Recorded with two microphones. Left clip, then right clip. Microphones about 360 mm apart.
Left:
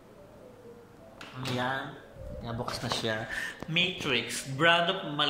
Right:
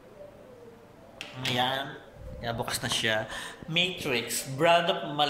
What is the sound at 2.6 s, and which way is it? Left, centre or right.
A woman's voice, centre.